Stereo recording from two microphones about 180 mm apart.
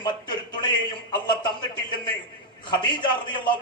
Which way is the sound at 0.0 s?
25° left (ahead or behind).